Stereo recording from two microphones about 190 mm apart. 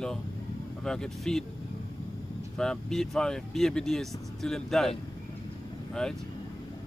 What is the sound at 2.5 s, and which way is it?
Speech, 5° left (ahead or behind).